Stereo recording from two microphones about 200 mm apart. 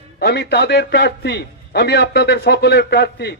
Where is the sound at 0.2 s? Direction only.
55° left (ahead or behind).